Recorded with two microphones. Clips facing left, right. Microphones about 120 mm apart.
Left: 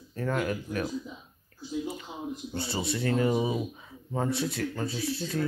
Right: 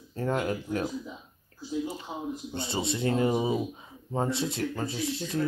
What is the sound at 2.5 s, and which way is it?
Speech, 20° right (ahead or behind).